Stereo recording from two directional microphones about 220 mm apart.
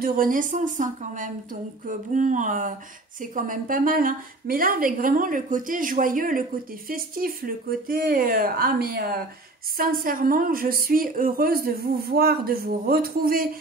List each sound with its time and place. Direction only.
0.0 s a woman's voice: 40° right (ahead or behind)